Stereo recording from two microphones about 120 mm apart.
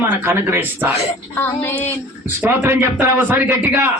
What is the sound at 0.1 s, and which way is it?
Speech, 20° right (ahead or behind).